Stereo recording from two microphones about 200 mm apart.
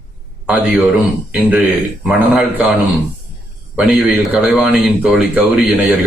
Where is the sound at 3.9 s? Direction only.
5° right (ahead or behind).